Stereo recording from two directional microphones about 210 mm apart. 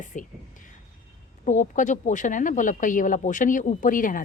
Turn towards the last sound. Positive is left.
turn(degrees=40)  # may be behind; listen again after turning